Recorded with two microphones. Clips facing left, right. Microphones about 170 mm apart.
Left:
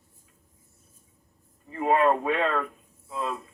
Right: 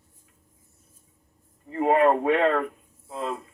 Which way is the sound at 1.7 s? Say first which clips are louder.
Right 2 dB; 55° right (ahead or behind).